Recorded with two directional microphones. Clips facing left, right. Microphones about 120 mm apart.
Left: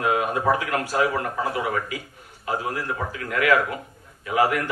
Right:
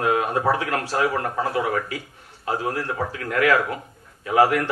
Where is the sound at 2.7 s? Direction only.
35° right (ahead or behind).